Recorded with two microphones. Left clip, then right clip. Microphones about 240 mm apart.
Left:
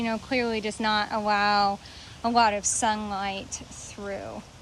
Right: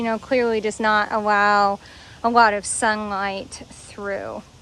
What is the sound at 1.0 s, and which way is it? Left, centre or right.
Speech, right.